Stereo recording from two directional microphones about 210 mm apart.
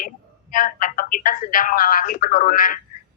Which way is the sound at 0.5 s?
40° left (ahead or behind).